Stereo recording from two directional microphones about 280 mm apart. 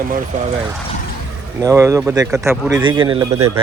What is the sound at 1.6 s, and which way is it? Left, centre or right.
Speech, centre.